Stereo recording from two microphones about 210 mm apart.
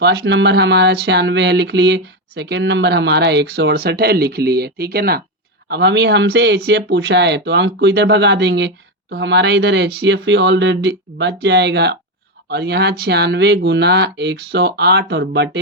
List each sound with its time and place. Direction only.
0.0 s speech: 50° right (ahead or behind)